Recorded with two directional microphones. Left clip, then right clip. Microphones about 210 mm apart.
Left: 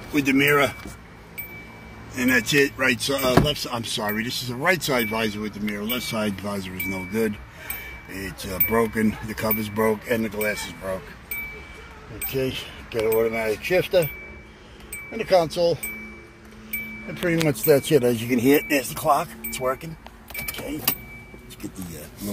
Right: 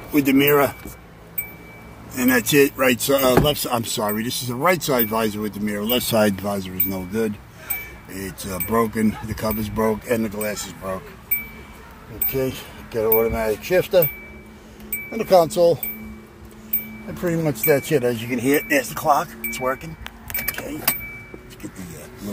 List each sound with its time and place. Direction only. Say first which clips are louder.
0.1 s speech: right 2 dB; 10° right (ahead or behind)
2.1 s speech: right 3 dB; 15° right (ahead or behind)
5.9 s speech: right 9 dB; 35° right (ahead or behind)
6.3 s speech: right 4 dB; 10° right (ahead or behind)
12.3 s speech: right 2 dB; 5° right (ahead or behind)
15.1 s speech: right 4 dB; 15° right (ahead or behind)
17.2 s speech: even; 5° left (ahead or behind)